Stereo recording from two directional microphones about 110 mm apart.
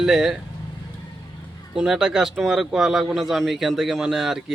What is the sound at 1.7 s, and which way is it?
Speech, 5° right (ahead or behind).